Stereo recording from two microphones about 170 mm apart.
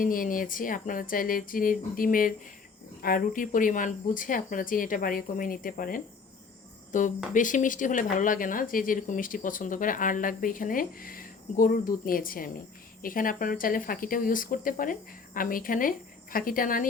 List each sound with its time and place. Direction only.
0.0 s speech: 55° left (ahead or behind)